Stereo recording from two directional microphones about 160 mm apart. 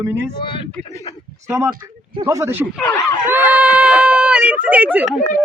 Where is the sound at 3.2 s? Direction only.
10° right (ahead or behind).